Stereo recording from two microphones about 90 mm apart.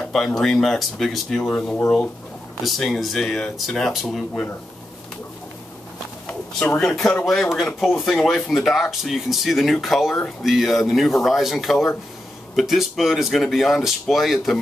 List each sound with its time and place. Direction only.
0.0 s speech: 5° left (ahead or behind)
1.5 s speech: 15° left (ahead or behind)
2.6 s speech: 5° left (ahead or behind)
6.2 s speech: 15° left (ahead or behind); by 14.6 s centre (ahead or behind)